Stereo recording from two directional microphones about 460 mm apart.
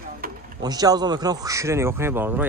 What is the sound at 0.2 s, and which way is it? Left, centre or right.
Speech, centre.